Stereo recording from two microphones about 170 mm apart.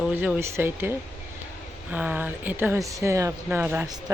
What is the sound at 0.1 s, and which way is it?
Speech, 10° right (ahead or behind).